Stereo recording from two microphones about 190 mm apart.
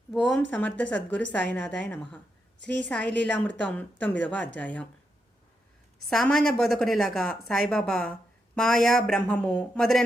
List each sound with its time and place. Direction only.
0.1 s a woman's voice: centre (ahead or behind)
6.1 s speech: centre (ahead or behind)